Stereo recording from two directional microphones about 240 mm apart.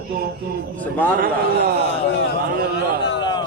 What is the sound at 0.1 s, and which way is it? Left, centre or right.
Speech, right.